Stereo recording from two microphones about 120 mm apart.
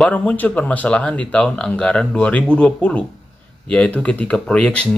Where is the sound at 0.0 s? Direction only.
5° left (ahead or behind).